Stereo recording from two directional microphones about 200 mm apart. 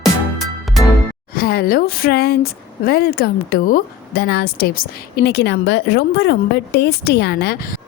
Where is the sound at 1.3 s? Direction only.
50° left (ahead or behind).